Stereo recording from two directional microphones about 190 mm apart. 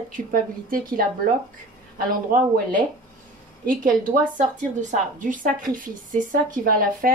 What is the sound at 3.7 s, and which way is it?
A woman's voice, 45° right (ahead or behind).